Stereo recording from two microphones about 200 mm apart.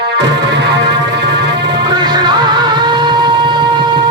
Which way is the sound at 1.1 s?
60° right (ahead or behind).